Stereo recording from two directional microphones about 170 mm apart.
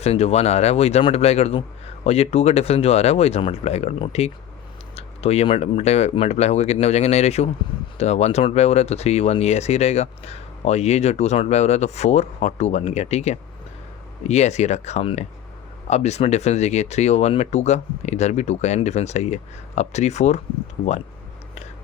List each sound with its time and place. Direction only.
0.0 s speech: 35° left (ahead or behind)